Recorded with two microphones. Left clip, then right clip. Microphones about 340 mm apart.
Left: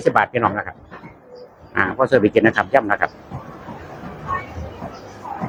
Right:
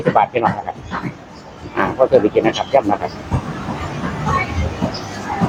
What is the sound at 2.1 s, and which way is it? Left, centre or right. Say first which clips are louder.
Speech: left 2 dB; left.